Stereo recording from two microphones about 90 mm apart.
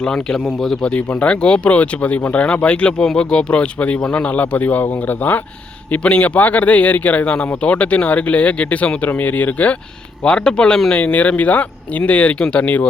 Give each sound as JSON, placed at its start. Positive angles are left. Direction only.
{"t": 0.0, "sound": "speech", "side_deg": 5}
{"t": 0.9, "sound": "speech", "side_deg": 15}